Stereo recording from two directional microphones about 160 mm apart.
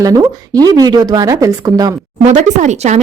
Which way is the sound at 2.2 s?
50° right (ahead or behind).